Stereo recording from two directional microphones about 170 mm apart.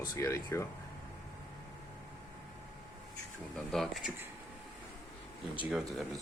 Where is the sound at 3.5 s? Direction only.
Centre (ahead or behind).